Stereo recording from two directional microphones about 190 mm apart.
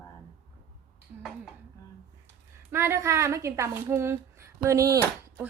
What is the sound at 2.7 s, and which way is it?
A woman's voice, 15° right (ahead or behind).